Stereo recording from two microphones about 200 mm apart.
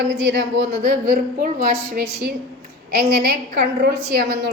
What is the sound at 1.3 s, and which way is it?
A woman's voice, 45° right (ahead or behind).